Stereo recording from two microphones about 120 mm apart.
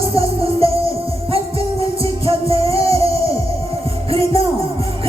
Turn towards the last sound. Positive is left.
turn(degrees=-55)  # may be behind; listen again after turning